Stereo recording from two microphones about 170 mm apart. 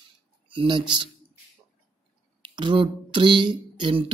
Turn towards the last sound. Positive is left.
turn(degrees=-30)  # may be behind; listen again after turning